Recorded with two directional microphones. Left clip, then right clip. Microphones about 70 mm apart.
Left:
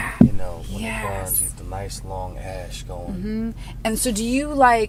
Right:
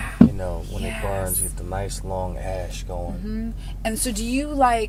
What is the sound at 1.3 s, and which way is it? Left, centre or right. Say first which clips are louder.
Speech: right 1 dB; centre.